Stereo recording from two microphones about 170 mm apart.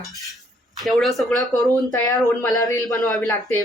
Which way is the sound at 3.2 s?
10° left (ahead or behind).